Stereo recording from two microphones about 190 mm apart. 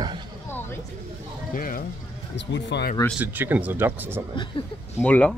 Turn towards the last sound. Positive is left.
turn(degrees=5)  # may be behind; listen again after turning